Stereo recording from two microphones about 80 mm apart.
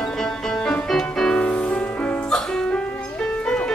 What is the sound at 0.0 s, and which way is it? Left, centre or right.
Music, centre.